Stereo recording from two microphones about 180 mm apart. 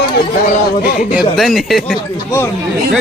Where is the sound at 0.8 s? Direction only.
55° left (ahead or behind).